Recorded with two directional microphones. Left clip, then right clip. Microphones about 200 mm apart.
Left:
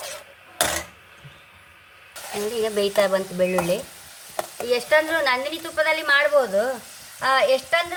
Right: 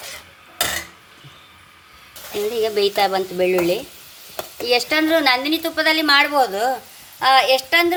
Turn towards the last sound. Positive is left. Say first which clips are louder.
# right 4 dB
turn(degrees=-25)  # may be behind; listen again after turning